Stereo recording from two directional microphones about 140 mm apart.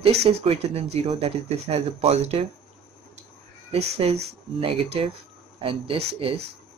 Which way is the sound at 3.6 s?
50° right (ahead or behind).